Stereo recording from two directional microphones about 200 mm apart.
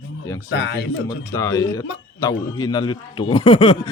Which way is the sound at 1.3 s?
15° left (ahead or behind).